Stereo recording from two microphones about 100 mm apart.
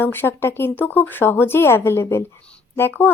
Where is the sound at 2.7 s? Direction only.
20° left (ahead or behind).